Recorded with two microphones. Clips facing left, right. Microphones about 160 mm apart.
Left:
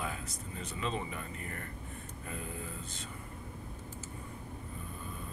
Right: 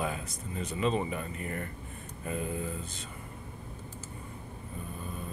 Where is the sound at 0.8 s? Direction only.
15° right (ahead or behind).